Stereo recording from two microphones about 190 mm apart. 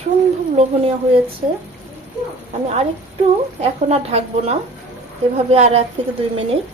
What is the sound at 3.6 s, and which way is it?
A woman's voice, 35° right (ahead or behind).